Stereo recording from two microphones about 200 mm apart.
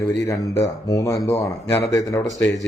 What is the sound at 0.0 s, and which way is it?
A man's voice, 15° left (ahead or behind).